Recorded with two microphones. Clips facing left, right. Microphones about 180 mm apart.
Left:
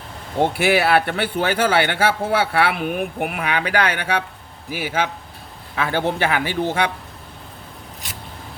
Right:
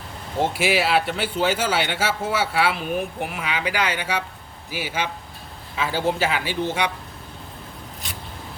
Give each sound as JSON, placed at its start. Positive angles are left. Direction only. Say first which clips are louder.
{"t": 0.5, "sound": "a man's voice", "louder": "left 3 dB", "side_deg": 60}